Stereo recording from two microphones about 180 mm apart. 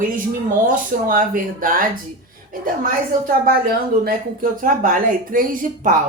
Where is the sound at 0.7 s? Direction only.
50° right (ahead or behind).